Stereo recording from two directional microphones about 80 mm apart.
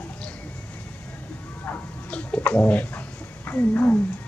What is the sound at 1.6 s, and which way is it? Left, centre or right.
Bird, centre.